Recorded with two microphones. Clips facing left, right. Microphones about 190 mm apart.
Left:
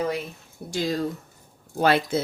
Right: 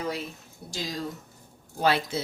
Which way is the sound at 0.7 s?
60° left (ahead or behind).